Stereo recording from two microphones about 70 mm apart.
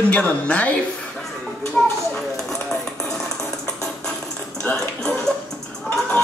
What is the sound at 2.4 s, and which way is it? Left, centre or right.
Music, centre.